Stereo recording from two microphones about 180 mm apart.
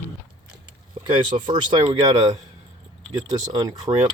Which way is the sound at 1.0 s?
35° right (ahead or behind).